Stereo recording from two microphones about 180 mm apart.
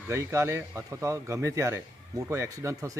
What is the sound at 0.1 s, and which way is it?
A man's voice, 15° right (ahead or behind).